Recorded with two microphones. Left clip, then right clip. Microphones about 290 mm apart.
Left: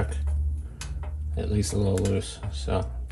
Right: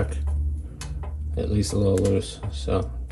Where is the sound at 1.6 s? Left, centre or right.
Centre.